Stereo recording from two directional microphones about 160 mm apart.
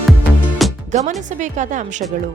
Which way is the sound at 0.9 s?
50° right (ahead or behind).